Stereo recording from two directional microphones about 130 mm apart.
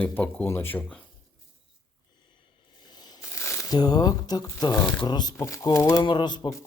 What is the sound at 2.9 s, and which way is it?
Speech, 30° left (ahead or behind).